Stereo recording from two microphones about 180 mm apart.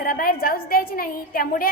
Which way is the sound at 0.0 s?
55° left (ahead or behind).